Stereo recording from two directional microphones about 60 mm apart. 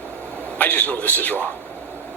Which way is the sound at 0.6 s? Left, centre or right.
Left.